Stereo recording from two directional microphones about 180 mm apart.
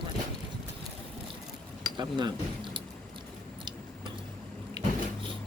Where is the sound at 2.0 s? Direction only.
25° right (ahead or behind).